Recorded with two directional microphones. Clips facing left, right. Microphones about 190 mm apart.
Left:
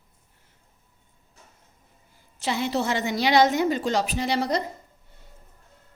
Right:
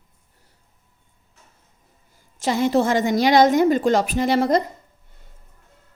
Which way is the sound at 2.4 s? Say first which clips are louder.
Right 7 dB; 45° right (ahead or behind).